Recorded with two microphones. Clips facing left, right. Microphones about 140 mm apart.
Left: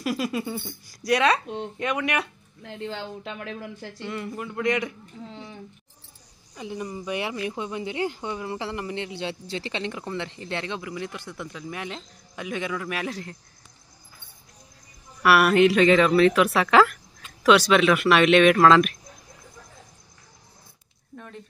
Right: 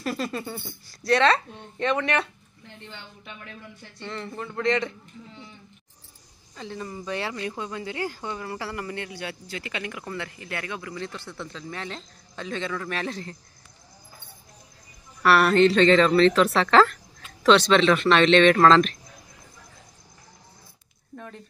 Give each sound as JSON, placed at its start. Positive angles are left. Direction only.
{"t": 0.0, "sound": "speech", "side_deg": 10}
{"t": 2.6, "sound": "speech", "side_deg": 90}
{"t": 4.0, "sound": "speech", "side_deg": 10}
{"t": 6.5, "sound": "speech", "side_deg": 15}
{"t": 15.2, "sound": "speech", "side_deg": 10}